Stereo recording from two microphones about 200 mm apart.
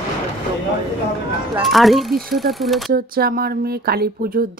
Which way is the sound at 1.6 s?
Centre (ahead or behind).